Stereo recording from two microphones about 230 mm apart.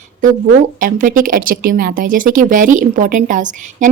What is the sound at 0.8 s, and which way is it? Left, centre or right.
Speech, right.